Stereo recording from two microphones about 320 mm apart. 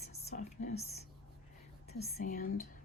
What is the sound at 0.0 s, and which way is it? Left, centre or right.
Whispering, centre.